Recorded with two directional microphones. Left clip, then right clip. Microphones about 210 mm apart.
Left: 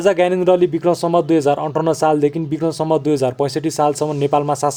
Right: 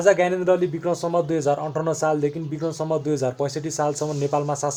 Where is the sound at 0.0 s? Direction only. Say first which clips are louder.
Left 4 dB; 45° left (ahead or behind).